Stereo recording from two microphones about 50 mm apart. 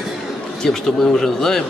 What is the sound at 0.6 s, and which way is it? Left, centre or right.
A man's voice, centre.